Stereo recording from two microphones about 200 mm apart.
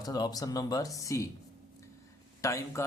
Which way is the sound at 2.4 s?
15° left (ahead or behind).